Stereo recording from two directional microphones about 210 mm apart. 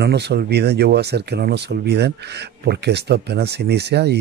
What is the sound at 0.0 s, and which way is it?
Speech, 50° right (ahead or behind).